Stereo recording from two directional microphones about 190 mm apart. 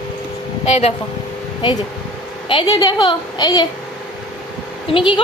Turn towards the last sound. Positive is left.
turn(degrees=25)  # may be behind; listen again after turning